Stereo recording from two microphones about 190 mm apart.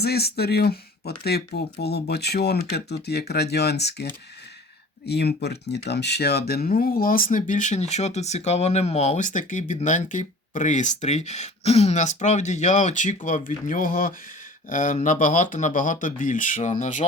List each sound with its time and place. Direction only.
0.0 s speech: 55° left (ahead or behind)
5.0 s speech: 60° left (ahead or behind); by 17.1 s 40° left (ahead or behind)